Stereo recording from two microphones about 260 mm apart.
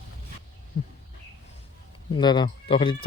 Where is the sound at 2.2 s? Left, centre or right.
Centre.